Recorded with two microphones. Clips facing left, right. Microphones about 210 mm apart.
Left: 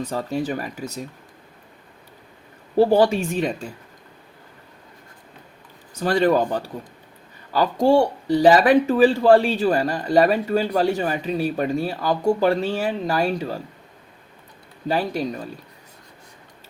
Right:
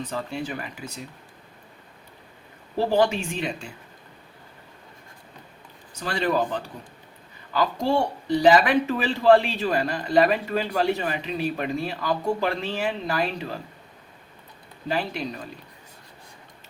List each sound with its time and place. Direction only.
0.0 s a man's voice: 40° left (ahead or behind)
2.9 s a man's voice: 40° left (ahead or behind)
6.0 s a man's voice: 40° left (ahead or behind)
14.8 s a man's voice: 35° left (ahead or behind)